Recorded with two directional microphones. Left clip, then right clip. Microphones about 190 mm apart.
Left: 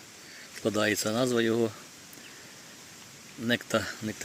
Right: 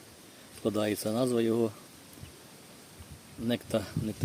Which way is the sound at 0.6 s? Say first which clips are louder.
Left 3 dB; centre (ahead or behind).